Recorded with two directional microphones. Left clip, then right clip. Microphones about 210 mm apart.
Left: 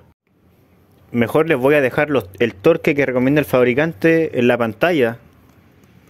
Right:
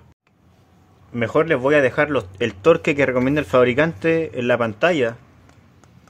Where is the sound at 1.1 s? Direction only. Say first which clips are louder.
Left 2 dB; 40° left (ahead or behind).